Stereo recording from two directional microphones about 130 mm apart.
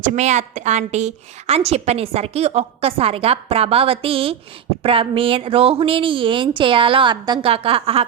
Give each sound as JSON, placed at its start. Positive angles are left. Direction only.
{"t": 0.0, "sound": "a woman's voice", "side_deg": -65}